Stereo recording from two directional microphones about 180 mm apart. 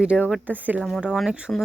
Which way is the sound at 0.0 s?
5° right (ahead or behind).